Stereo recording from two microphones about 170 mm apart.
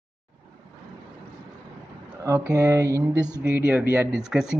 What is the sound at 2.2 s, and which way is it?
Speech, 15° right (ahead or behind).